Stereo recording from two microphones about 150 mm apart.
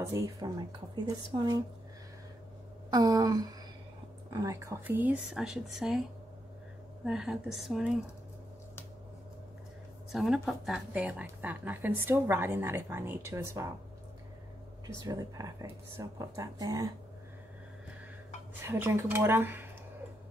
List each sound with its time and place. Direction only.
0.0 s speech: 20° right (ahead or behind)
2.9 s a woman's voice: 25° right (ahead or behind); by 6.0 s centre (ahead or behind)
7.1 s speech: 5° right (ahead or behind)
10.1 s a woman's voice: centre (ahead or behind); by 13.7 s 15° right (ahead or behind)
14.9 s speech: 25° right (ahead or behind)
18.6 s a woman's voice: 15° right (ahead or behind)